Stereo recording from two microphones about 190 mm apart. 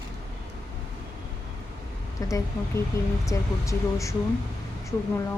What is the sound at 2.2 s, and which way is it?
A woman's voice, 15° left (ahead or behind).